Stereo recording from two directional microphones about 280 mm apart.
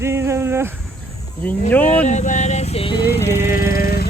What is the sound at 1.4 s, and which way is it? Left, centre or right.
Speech, centre.